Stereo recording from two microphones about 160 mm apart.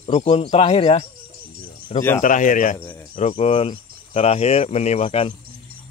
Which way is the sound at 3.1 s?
40° left (ahead or behind).